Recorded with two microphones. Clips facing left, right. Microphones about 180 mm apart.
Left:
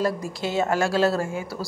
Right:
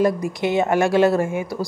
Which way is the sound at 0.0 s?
15° right (ahead or behind).